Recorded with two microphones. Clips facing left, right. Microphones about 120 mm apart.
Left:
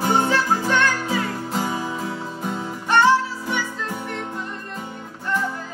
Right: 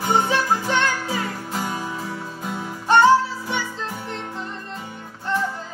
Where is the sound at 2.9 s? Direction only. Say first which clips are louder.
Right 2 dB; 35° right (ahead or behind).